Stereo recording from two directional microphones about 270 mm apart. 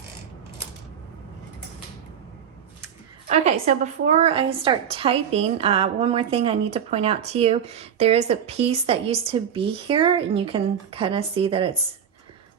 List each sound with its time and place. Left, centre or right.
3.2 s a woman's voice: right